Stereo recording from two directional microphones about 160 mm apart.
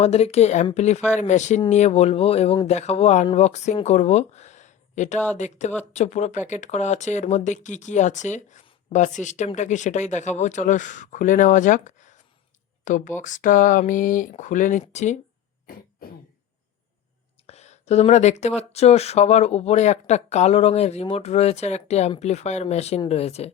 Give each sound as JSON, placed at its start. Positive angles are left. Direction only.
{"t": 0.0, "sound": "speech", "side_deg": 40}
{"t": 17.4, "sound": "speech", "side_deg": 45}